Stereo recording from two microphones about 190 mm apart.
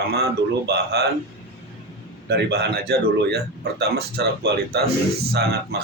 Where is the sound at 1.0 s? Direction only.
60° right (ahead or behind).